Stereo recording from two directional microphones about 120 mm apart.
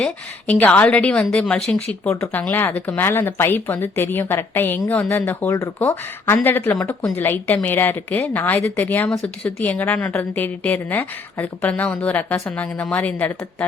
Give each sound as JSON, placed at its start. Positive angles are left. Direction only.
{"t": 0.0, "sound": "a woman's voice", "side_deg": 10}
{"t": 9.6, "sound": "a woman's voice", "side_deg": 15}